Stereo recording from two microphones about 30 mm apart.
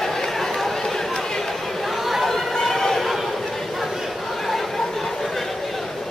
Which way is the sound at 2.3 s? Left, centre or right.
Centre.